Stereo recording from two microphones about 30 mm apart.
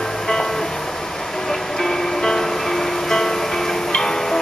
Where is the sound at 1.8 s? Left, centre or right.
Centre.